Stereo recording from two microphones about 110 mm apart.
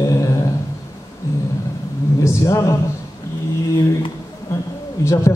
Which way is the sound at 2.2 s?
25° left (ahead or behind).